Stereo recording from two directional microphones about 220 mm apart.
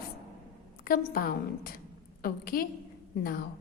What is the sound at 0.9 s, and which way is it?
A woman's voice, 40° left (ahead or behind).